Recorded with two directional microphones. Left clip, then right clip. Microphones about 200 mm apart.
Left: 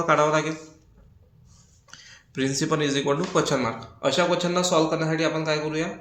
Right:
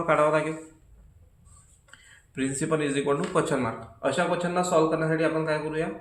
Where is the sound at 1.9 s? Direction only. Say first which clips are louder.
Left 4 dB; 20° left (ahead or behind).